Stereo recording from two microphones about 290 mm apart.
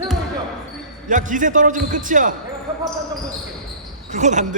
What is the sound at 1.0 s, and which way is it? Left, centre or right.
Speech, right.